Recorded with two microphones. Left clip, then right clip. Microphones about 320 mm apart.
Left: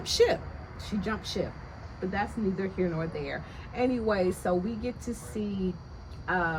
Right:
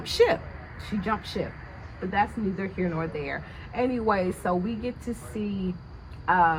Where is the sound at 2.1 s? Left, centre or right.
Centre.